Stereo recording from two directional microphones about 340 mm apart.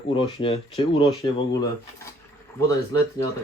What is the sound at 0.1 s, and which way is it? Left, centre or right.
Speech, centre.